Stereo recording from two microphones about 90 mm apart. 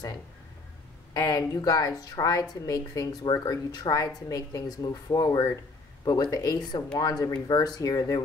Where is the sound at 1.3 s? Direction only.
40° left (ahead or behind).